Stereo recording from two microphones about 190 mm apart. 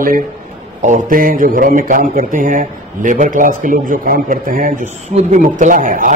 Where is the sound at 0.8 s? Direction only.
45° right (ahead or behind).